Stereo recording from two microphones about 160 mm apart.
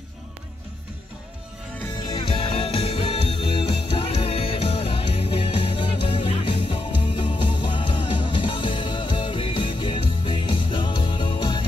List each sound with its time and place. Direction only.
2.0 s music: 35° left (ahead or behind)